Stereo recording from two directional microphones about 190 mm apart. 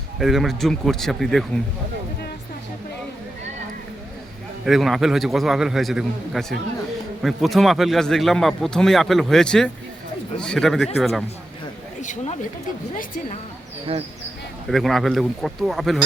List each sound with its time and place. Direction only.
0.2 s a man's voice: centre (ahead or behind)
4.6 s a man's voice: centre (ahead or behind)
11.9 s speech: 35° left (ahead or behind)
13.9 s speech: 30° right (ahead or behind)
14.7 s a man's voice: centre (ahead or behind)